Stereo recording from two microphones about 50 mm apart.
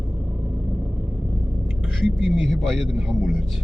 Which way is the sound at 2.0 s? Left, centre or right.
Centre.